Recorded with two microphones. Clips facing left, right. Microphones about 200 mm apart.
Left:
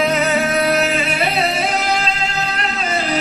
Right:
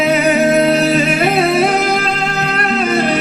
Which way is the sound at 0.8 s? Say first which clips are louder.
Right 6 dB; 40° right (ahead or behind).